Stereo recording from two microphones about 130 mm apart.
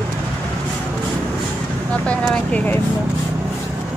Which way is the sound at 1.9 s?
10° left (ahead or behind).